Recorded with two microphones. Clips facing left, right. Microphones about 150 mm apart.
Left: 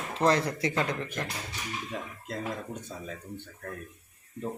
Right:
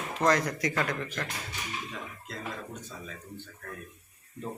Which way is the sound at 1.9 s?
50° left (ahead or behind).